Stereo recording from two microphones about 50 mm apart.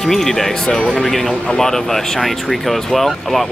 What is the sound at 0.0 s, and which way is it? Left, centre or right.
Speech, centre.